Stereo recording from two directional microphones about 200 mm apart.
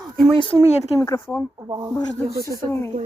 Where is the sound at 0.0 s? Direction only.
Centre (ahead or behind).